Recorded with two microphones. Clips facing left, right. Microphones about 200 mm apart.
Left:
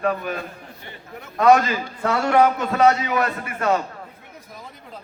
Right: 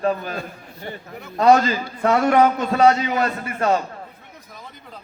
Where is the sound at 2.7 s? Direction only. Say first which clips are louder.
Right 1 dB; 30° right (ahead or behind).